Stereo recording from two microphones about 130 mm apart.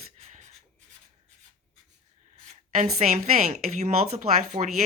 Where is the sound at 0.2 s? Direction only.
60° right (ahead or behind).